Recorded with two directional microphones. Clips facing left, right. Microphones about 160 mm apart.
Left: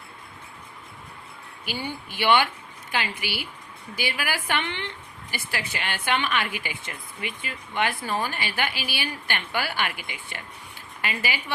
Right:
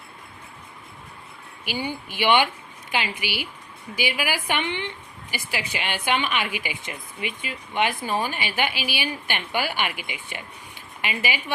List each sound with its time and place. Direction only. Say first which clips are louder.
1.6 s a woman's voice: right 3 dB; 15° right (ahead or behind)